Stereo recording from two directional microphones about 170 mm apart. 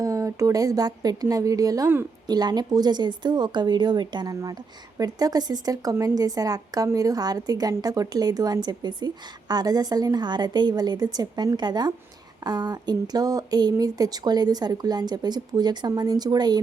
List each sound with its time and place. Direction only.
0.0 s a woman's voice: 20° right (ahead or behind)